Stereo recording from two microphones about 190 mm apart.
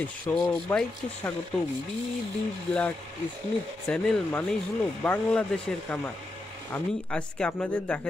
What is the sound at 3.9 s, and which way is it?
Speech, 5° left (ahead or behind).